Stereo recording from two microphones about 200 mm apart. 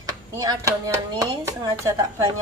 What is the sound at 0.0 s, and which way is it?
Speech, 15° right (ahead or behind).